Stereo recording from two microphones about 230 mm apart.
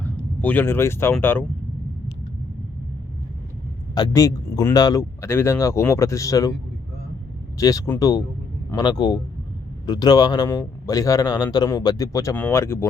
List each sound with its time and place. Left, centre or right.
0.0 s speech: centre
3.9 s a man's voice: centre
7.6 s a man's voice: centre